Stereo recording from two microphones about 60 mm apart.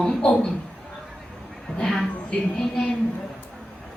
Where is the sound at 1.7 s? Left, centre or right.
Centre.